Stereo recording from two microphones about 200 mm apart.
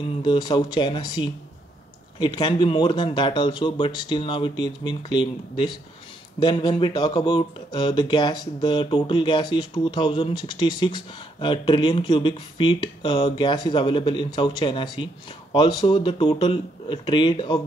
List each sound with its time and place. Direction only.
0.2 s speech: 25° left (ahead or behind)